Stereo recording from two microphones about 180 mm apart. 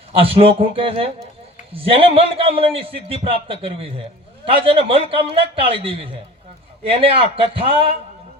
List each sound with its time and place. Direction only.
0.1 s a man's voice: 30° right (ahead or behind)